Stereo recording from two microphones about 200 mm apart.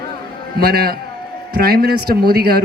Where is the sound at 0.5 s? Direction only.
50° right (ahead or behind).